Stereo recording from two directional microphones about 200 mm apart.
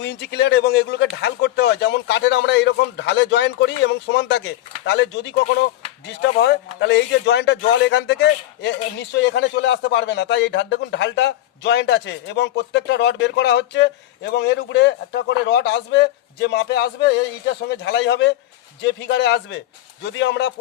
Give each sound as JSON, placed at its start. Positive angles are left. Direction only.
{"t": 0.0, "sound": "a man's voice", "side_deg": 60}